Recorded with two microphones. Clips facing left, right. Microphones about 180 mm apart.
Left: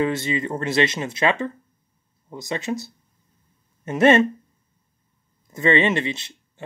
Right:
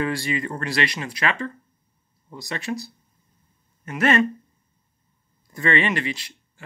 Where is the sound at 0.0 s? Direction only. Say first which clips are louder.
Left 3 dB; 20° left (ahead or behind).